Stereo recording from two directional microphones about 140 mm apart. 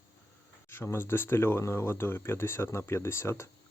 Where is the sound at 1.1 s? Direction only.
15° left (ahead or behind).